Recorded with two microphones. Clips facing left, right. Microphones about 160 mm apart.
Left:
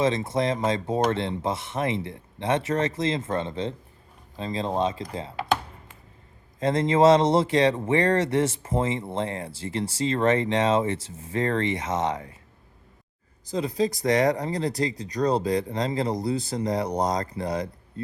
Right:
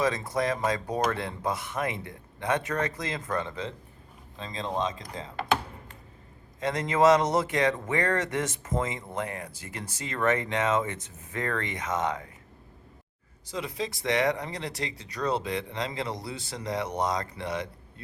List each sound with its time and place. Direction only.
0.0 s speech: 25° left (ahead or behind)
6.6 s speech: 30° left (ahead or behind)
13.5 s speech: 35° left (ahead or behind)